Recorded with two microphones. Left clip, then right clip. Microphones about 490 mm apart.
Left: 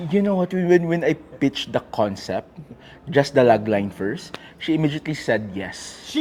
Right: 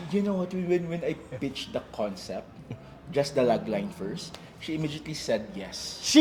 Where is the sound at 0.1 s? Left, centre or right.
Left.